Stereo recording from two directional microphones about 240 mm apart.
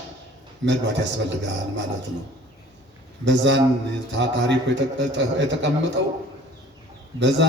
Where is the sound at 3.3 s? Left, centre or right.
Right.